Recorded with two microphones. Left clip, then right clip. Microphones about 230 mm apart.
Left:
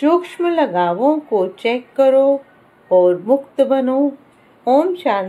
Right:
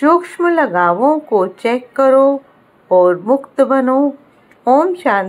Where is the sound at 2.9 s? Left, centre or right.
Centre.